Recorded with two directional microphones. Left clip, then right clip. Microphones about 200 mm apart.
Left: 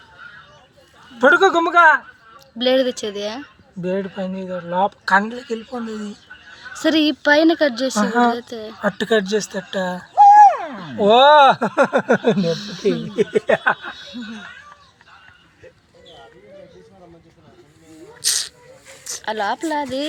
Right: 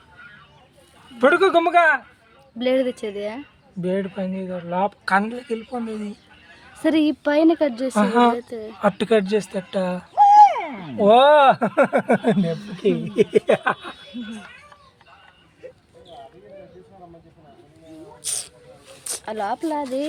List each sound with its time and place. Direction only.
1.2 s speech: 5° right (ahead or behind)
7.9 s a woman's voice: 35° right (ahead or behind)
8.4 s speech: 5° right (ahead or behind)
8.8 s speech: 25° right (ahead or behind)
10.2 s a sound: 20° left (ahead or behind)
11.0 s speech: centre (ahead or behind)
12.0 s a sound: 15° left (ahead or behind)
12.5 s speech: 5° right (ahead or behind)
13.1 s a sound: 50° right (ahead or behind)
18.2 s snake: centre (ahead or behind)
19.2 s speech: centre (ahead or behind)